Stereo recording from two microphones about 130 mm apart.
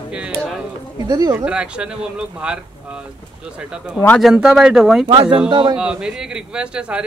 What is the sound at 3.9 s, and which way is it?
Speech, 15° left (ahead or behind).